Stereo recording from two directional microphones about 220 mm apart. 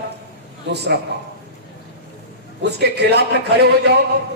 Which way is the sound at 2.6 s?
50° right (ahead or behind).